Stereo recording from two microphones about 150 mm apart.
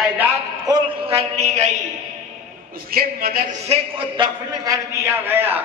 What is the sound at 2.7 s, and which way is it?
Speech, 75° right (ahead or behind).